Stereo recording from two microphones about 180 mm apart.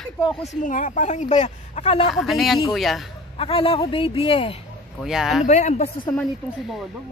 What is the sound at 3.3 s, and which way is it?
A woman's voice, 30° left (ahead or behind).